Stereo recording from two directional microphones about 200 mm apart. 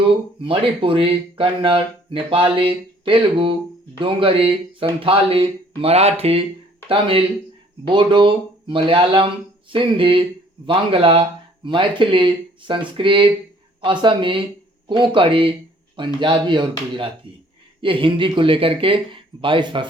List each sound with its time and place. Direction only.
0.4 s speech: 25° right (ahead or behind)